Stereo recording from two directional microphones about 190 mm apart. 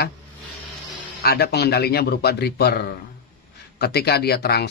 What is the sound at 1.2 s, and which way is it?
Speech, 55° left (ahead or behind).